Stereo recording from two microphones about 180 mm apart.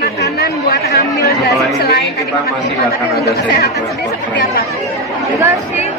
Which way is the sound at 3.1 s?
60° left (ahead or behind).